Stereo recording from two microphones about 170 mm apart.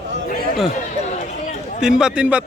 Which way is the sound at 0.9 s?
45° left (ahead or behind).